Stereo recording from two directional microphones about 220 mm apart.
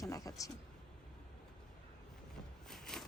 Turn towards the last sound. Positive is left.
turn(degrees=0)  # may be behind; listen again after turning